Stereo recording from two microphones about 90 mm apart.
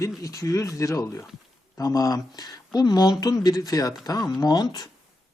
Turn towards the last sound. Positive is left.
turn(degrees=50)  # may be behind; listen again after turning